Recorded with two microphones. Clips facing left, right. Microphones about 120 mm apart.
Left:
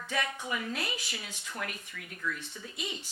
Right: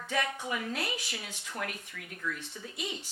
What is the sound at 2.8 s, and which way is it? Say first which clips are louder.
Speech: right 1 dB; 55° right (ahead or behind).